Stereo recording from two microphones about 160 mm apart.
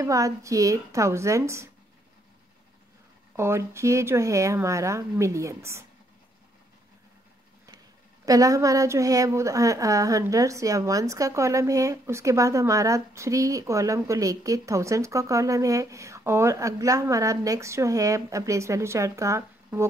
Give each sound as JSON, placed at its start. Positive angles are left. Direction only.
{"t": 0.0, "sound": "a woman's voice", "side_deg": -20}
{"t": 3.3, "sound": "speech", "side_deg": -15}
{"t": 8.3, "sound": "a woman's voice", "side_deg": -20}